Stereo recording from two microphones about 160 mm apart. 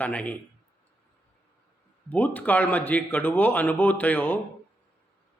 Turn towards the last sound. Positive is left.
turn(degrees=10)  # may be behind; listen again after turning